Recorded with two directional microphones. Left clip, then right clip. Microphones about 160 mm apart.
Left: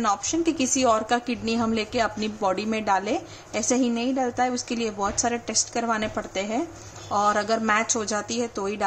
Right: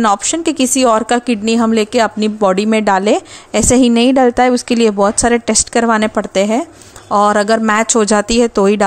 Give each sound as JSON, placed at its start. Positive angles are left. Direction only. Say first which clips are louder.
{"t": 0.0, "sound": "a woman's voice", "louder": "right 10 dB", "side_deg": -50}